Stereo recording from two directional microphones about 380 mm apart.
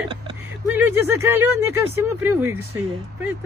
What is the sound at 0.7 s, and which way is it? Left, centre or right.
Speech, centre.